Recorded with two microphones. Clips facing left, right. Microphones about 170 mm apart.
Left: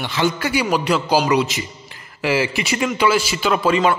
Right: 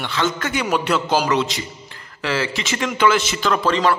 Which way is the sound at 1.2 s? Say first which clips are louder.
Left 2 dB; 15° left (ahead or behind).